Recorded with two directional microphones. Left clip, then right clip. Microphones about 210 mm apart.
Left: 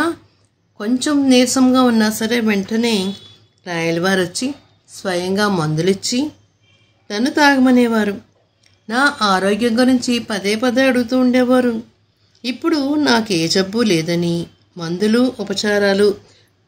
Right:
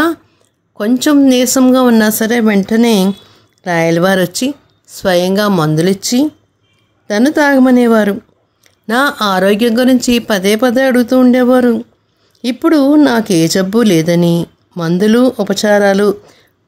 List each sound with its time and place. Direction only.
0.7 s speech: 40° right (ahead or behind)